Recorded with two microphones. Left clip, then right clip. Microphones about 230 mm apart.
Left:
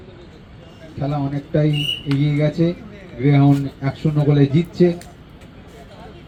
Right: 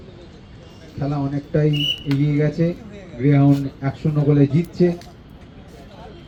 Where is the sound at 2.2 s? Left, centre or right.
Left.